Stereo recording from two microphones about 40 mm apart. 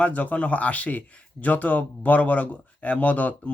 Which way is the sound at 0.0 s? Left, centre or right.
Left.